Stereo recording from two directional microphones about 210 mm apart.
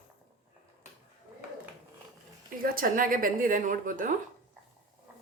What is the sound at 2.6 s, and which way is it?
Speech, 45° right (ahead or behind).